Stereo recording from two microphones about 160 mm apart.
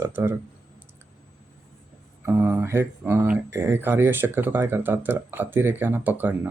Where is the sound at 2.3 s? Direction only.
15° right (ahead or behind).